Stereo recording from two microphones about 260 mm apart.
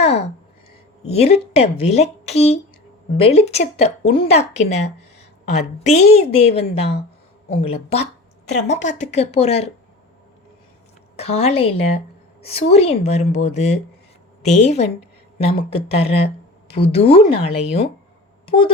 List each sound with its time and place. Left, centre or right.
0.0 s a sound: left
1.0 s speech: left
11.2 s speech: left